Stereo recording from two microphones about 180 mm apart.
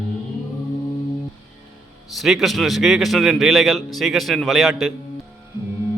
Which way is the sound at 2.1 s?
Centre (ahead or behind).